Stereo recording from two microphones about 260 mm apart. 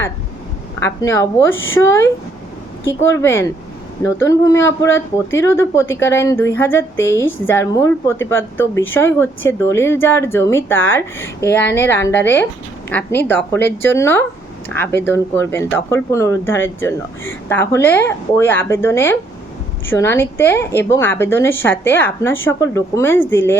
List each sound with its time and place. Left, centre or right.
0.8 s speech: centre
1.5 s a woman's voice: left
1.8 s speech: centre